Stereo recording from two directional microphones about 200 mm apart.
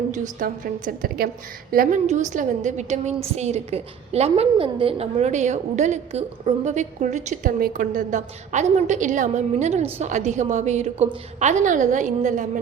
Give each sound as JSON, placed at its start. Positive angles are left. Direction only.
{"t": 0.1, "sound": "a woman's voice", "side_deg": -40}